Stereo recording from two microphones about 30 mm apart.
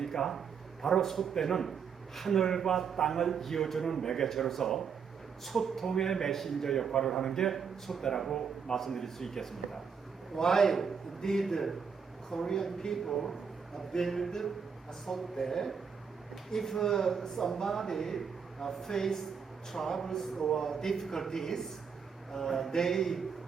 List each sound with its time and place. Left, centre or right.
0.0 s a sound: centre
0.9 s a man's voice: centre
8.3 s a man's voice: centre